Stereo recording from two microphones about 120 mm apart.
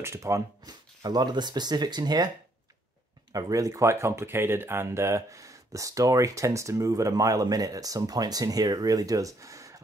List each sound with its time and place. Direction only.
0.0 s speech: 25° right (ahead or behind)
3.3 s speech: 30° right (ahead or behind)